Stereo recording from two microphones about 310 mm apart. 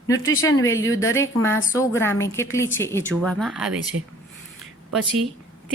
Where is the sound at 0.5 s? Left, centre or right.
Left.